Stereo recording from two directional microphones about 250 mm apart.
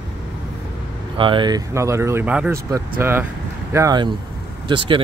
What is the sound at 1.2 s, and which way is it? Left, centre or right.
Speech, centre.